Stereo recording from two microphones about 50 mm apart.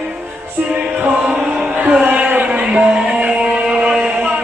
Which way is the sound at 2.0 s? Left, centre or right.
Right.